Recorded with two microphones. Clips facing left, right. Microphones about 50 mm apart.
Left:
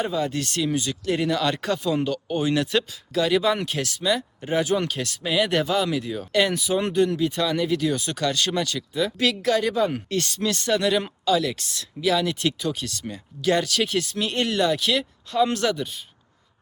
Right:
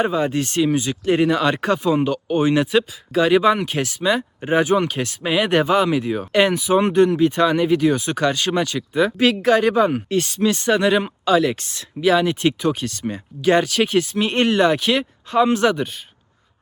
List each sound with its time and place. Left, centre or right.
0.0 s speech: right
9.9 s speech: centre
15.7 s speech: right